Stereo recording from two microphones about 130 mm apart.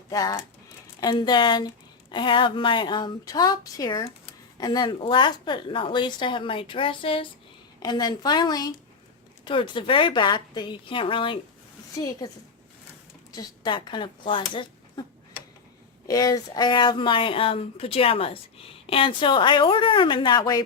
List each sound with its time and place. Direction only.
0.1 s a woman's voice: 25° left (ahead or behind); by 7.3 s 40° left (ahead or behind)
7.8 s a woman's voice: 30° left (ahead or behind)
11.9 s a woman's voice: 30° left (ahead or behind)
13.3 s speech: 35° left (ahead or behind)
16.0 s a woman's voice: 30° left (ahead or behind)